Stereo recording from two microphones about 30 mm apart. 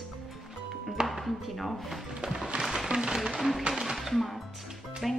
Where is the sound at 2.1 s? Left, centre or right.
Right.